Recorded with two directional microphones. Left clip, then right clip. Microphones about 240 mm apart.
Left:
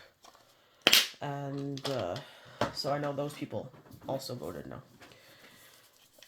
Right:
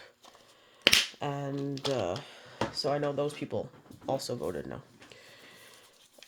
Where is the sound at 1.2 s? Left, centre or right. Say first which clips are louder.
Right 3 dB; right.